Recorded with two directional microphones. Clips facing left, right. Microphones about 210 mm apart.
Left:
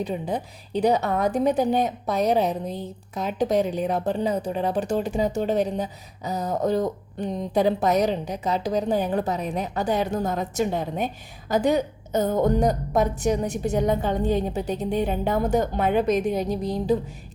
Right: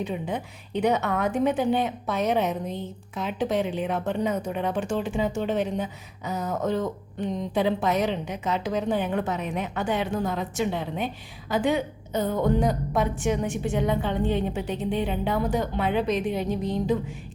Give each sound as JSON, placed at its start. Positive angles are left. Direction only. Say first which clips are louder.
{"t": 0.0, "sound": "a woman's voice", "louder": "left 2 dB", "side_deg": 35}